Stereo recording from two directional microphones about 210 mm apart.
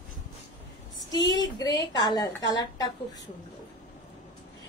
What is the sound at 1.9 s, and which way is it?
Speech, 20° left (ahead or behind).